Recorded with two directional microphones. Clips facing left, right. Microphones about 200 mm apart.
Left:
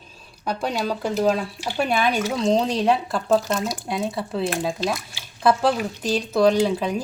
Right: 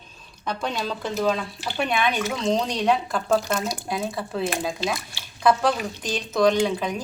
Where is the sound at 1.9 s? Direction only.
35° left (ahead or behind).